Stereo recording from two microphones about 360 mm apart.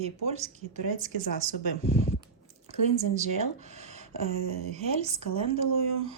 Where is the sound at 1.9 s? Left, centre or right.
Left.